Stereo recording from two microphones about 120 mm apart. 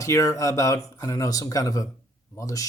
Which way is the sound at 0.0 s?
25° left (ahead or behind).